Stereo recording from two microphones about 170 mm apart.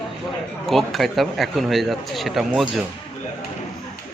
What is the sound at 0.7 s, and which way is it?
Speech, centre (ahead or behind).